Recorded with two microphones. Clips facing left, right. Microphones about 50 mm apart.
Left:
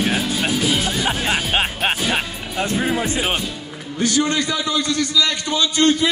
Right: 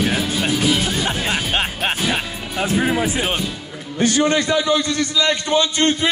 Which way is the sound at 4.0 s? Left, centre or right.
Right.